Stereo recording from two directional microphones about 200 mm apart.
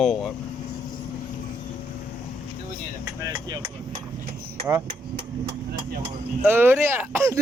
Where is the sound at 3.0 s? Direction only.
15° right (ahead or behind).